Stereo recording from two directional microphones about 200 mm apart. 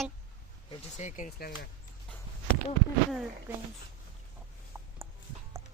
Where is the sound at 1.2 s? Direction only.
50° left (ahead or behind).